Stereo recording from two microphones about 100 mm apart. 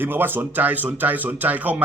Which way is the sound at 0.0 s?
20° right (ahead or behind).